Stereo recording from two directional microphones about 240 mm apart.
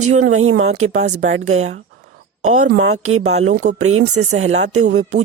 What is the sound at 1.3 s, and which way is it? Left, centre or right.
Speech, right.